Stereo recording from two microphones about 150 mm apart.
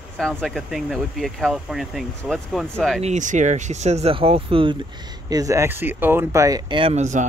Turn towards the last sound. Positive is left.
turn(degrees=-50)  # may be behind; listen again after turning